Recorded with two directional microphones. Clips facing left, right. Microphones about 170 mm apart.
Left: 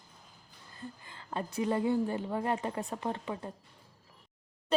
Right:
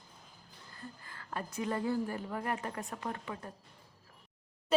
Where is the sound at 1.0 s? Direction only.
25° left (ahead or behind).